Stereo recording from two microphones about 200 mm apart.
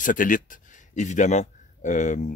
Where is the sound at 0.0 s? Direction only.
40° left (ahead or behind).